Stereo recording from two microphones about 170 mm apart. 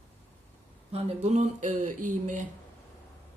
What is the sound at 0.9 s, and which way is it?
Speech, 40° right (ahead or behind).